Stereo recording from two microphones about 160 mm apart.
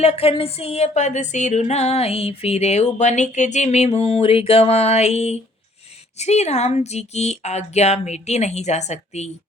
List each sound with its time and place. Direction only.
0.0 s music: 40° left (ahead or behind)